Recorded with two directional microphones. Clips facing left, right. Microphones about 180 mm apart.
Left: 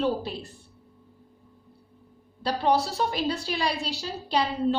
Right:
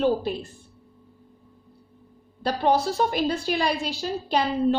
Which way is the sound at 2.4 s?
50° right (ahead or behind).